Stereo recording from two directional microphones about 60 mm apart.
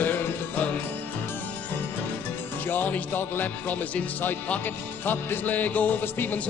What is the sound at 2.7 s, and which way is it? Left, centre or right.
Music, left.